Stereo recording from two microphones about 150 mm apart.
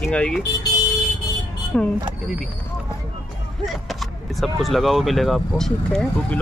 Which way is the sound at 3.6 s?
Centre (ahead or behind).